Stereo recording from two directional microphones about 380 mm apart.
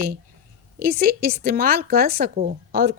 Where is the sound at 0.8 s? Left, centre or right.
Right.